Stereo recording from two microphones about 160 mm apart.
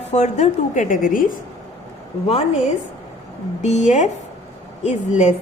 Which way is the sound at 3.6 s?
45° left (ahead or behind).